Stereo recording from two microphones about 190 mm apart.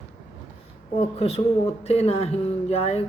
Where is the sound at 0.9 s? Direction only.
35° left (ahead or behind).